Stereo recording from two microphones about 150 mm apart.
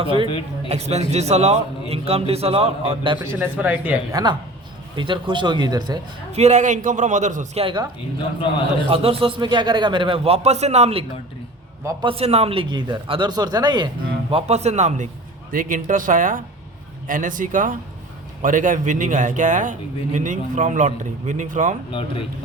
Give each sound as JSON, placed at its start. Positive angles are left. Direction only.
{"t": 0.0, "sound": "speech", "side_deg": -35}
{"t": 0.3, "sound": "speech", "side_deg": 35}
{"t": 0.7, "sound": "a man's voice", "side_deg": -45}
{"t": 3.2, "sound": "speech", "side_deg": -10}
{"t": 4.1, "sound": "speech", "side_deg": -30}
{"t": 6.3, "sound": "a man's voice", "side_deg": -50}
{"t": 7.6, "sound": "speech", "side_deg": -35}
{"t": 8.9, "sound": "speech", "side_deg": -40}
{"t": 12.0, "sound": "speech", "side_deg": -40}
{"t": 15.5, "sound": "a man's voice", "side_deg": -60}